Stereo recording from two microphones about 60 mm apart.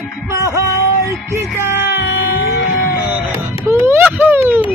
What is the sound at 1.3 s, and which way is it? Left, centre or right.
Music, right.